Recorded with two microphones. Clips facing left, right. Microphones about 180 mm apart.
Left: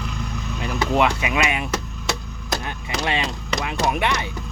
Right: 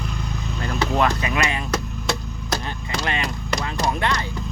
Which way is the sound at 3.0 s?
20° left (ahead or behind).